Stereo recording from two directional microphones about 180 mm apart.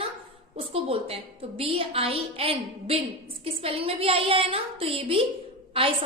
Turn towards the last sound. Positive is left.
turn(degrees=-30)  # may be behind; listen again after turning